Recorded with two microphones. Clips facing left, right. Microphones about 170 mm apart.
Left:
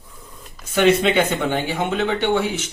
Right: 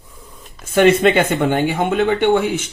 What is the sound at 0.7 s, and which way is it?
Speech, 50° right (ahead or behind).